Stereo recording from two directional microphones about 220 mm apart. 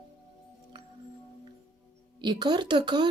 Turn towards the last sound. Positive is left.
turn(degrees=-20)  # may be behind; listen again after turning